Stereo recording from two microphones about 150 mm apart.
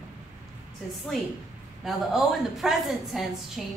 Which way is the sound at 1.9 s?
Centre (ahead or behind).